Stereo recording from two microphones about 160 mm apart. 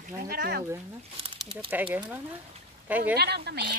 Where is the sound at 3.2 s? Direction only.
90° right.